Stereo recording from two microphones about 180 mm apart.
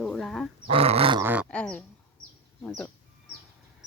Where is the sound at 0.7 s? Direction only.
30° right (ahead or behind).